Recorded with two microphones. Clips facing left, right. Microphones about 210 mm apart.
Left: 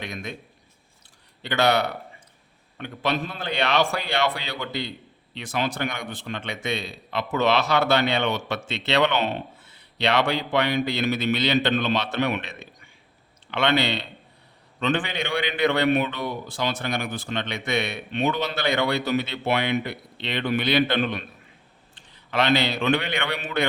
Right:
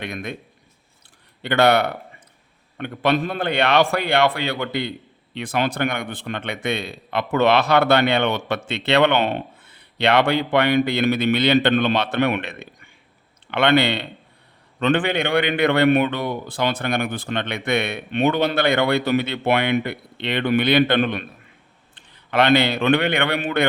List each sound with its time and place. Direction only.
0.0 s a man's voice: 55° right (ahead or behind)
1.4 s a man's voice: 55° right (ahead or behind)